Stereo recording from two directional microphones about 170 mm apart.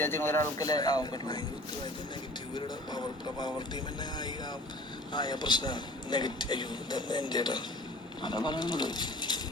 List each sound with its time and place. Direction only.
0.0 s a man's voice: 15° left (ahead or behind)
2.6 s a man's voice: 25° left (ahead or behind)
5.1 s a man's voice: 25° left (ahead or behind)